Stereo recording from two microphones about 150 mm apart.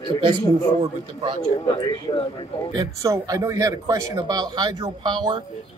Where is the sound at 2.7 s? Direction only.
25° right (ahead or behind).